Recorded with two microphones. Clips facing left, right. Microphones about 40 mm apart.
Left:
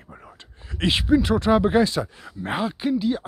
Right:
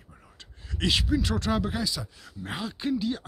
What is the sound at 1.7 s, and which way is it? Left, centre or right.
Speech, left.